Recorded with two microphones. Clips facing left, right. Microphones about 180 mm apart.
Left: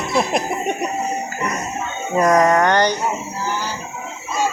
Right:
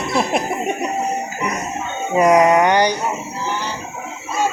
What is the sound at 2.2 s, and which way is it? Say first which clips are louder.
Speech: right 2 dB; 10° right (ahead or behind).